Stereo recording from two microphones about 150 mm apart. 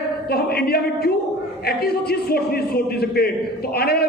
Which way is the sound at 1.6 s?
90° left.